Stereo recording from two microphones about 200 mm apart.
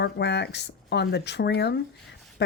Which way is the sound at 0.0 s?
60° left (ahead or behind).